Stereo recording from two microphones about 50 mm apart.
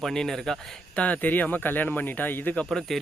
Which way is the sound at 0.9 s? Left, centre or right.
Left.